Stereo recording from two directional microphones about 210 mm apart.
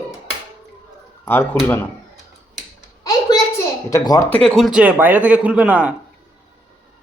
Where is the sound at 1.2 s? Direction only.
10° left (ahead or behind).